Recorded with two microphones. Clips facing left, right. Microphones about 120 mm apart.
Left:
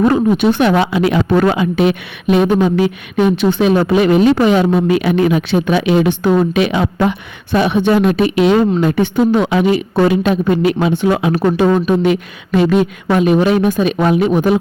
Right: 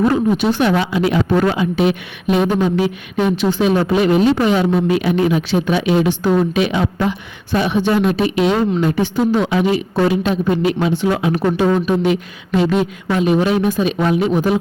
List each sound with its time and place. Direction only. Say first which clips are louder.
0.0 s speech: left 3 dB; 60° left (ahead or behind)